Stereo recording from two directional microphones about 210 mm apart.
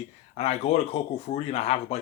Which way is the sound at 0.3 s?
30° left (ahead or behind).